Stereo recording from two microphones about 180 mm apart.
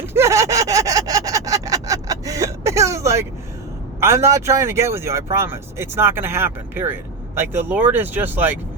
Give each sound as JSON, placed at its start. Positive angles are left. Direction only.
{"t": 0.0, "sound": "gasp", "side_deg": -15}
{"t": 4.0, "sound": "speech", "side_deg": -15}